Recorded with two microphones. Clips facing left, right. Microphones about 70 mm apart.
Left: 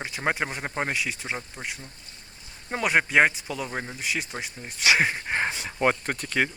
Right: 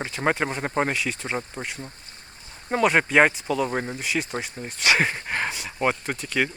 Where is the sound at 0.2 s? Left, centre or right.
Right.